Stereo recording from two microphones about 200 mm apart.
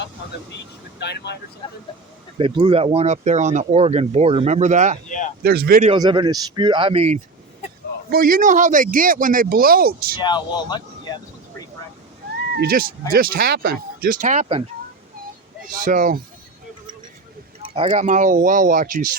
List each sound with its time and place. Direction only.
0.5 s speech: 60° left (ahead or behind)
1.6 s speech: 25° left (ahead or behind)
2.4 s speech: 25° right (ahead or behind)
5.0 s speech: 40° left (ahead or behind)
5.4 s speech: 50° right (ahead or behind)
5.8 s speech: 25° right (ahead or behind)
8.1 s speech: 45° right (ahead or behind)
10.2 s speech: 20° left (ahead or behind)
12.5 s speech: 45° right (ahead or behind)
15.8 s speech: 40° right (ahead or behind)
17.6 s a sound: 25° right (ahead or behind)
18.0 s speech: 40° right (ahead or behind)